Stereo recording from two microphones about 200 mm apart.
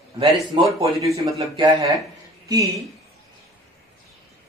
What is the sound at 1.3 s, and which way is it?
Speech, 25° right (ahead or behind).